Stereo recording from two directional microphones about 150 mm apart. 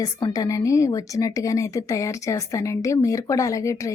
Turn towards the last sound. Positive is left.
turn(degrees=20)  # may be behind; listen again after turning